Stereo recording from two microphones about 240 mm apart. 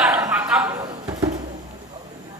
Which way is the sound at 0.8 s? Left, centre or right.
Centre.